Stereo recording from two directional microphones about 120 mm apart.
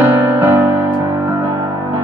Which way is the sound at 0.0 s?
20° right (ahead or behind).